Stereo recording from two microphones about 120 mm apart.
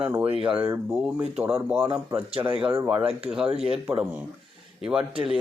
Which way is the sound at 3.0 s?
5° right (ahead or behind).